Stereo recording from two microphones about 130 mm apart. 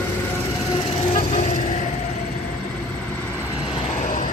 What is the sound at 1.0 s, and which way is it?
Vehicle, 65° left (ahead or behind).